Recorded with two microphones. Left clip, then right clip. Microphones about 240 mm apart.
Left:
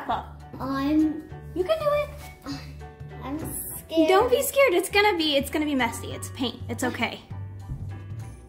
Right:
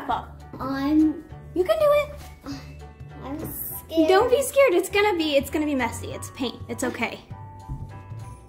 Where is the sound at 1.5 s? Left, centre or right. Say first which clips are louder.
Right 4 dB; right.